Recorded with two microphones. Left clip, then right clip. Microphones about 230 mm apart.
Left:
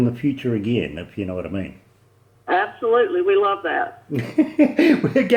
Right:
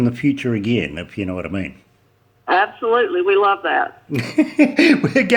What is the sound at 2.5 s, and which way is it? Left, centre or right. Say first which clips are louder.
A man's voice: right 3 dB; centre.